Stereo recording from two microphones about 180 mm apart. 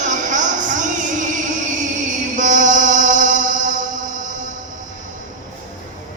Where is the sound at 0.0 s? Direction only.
45° right (ahead or behind).